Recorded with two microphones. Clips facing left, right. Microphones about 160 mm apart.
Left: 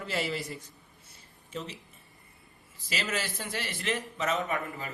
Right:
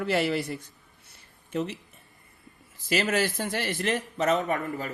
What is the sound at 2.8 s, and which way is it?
A man's voice, 50° right (ahead or behind).